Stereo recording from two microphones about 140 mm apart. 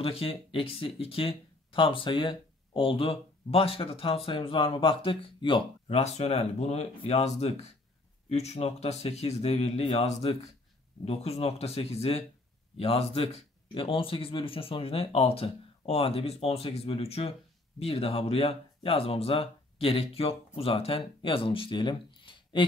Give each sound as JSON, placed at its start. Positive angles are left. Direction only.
{"t": 0.0, "sound": "speech", "side_deg": 45}